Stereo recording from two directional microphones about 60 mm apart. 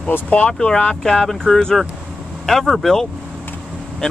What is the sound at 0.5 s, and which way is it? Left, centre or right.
Speech, centre.